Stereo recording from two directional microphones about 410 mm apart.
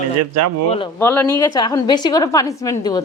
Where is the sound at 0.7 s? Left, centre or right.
Centre.